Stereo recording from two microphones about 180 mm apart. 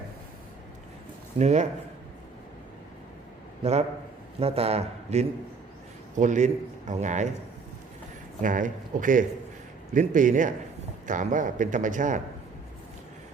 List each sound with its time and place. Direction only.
1.4 s a man's voice: 40° right (ahead or behind)
3.6 s a man's voice: 35° right (ahead or behind)
8.4 s a man's voice: 45° right (ahead or behind)